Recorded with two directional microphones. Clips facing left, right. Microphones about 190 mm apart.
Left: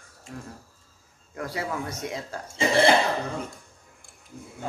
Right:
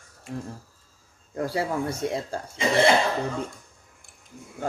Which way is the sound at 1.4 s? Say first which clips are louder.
Right 5 dB; 30° right (ahead or behind).